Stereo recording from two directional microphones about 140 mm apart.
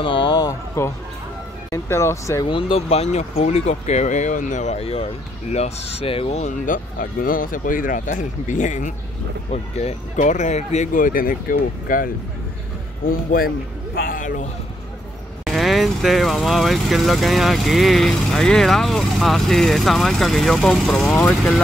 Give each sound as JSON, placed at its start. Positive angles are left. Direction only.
{"t": 0.0, "sound": "a sound", "side_deg": 35}
{"t": 0.5, "sound": "speech", "side_deg": 20}
{"t": 2.4, "sound": "speech", "side_deg": 40}
{"t": 6.6, "sound": "a man's voice", "side_deg": 75}
{"t": 15.4, "sound": "speech", "side_deg": 0}